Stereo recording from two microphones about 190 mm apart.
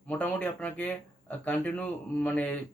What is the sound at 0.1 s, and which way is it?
Speech, 10° left (ahead or behind).